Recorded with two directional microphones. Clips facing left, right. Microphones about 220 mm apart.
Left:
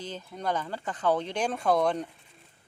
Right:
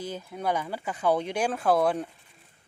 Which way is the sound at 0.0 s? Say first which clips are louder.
Right 3 dB; 10° right (ahead or behind).